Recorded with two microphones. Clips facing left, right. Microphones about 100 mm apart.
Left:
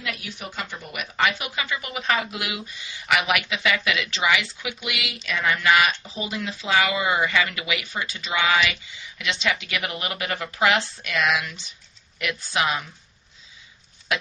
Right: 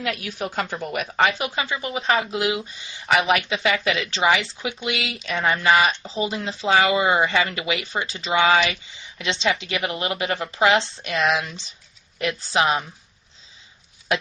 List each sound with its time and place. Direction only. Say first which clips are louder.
0.2 s speech: right 7 dB; 50° right (ahead or behind)
0.9 s speech: right 3 dB; 35° right (ahead or behind)